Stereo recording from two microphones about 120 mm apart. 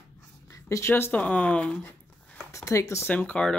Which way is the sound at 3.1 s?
10° left (ahead or behind).